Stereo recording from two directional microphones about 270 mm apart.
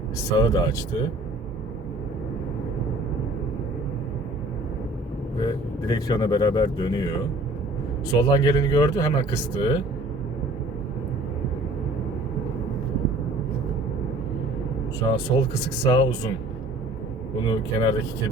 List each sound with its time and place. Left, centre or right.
0.3 s speech: centre
5.4 s speech: centre
15.0 s speech: centre
17.4 s speech: centre